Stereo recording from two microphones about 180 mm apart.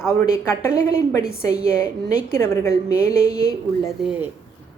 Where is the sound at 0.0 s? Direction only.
15° left (ahead or behind).